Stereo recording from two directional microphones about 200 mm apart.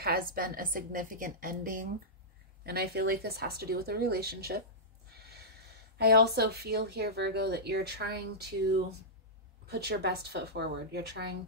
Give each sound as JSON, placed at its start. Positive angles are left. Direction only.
{"t": 0.0, "sound": "speech", "side_deg": -50}
{"t": 5.1, "sound": "snort", "side_deg": -50}
{"t": 5.9, "sound": "speech", "side_deg": -55}
{"t": 9.7, "sound": "speech", "side_deg": -55}